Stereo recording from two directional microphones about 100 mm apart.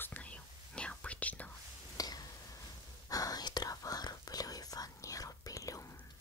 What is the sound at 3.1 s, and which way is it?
Whispering, 40° left (ahead or behind).